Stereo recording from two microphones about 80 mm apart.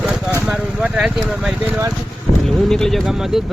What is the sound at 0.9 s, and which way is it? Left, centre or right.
Speech, centre.